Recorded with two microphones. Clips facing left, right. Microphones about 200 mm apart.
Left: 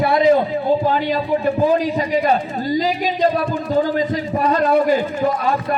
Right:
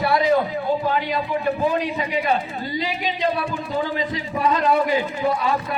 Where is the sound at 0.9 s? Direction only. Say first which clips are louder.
Left 4 dB; 35° left (ahead or behind).